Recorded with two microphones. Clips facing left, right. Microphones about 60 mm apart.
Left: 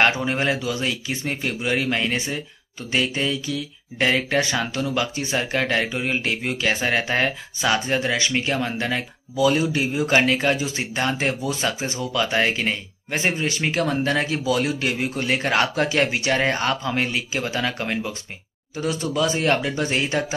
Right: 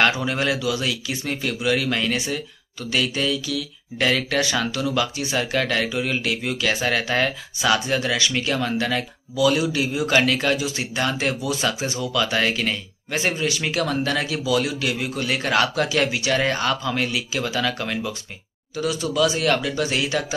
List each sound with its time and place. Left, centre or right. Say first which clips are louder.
0.0 s speech: left 1 dB; left